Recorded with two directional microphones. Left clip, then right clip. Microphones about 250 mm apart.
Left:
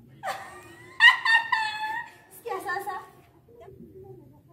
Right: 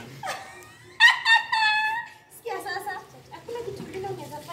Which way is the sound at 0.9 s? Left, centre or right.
Centre.